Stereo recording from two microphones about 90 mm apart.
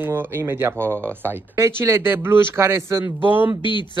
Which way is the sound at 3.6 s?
60° left (ahead or behind).